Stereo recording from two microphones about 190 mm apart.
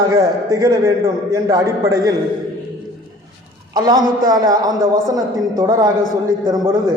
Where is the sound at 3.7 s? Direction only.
20° right (ahead or behind).